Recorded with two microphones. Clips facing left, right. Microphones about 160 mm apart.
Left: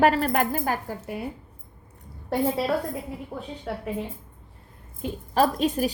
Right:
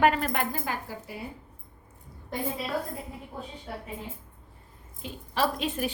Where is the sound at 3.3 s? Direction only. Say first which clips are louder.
Left 5 dB; 70° left (ahead or behind).